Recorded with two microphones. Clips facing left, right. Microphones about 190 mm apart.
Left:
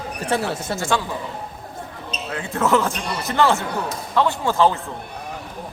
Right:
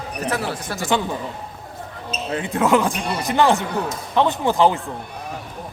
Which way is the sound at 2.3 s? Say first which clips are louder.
Right 2 dB; 20° right (ahead or behind).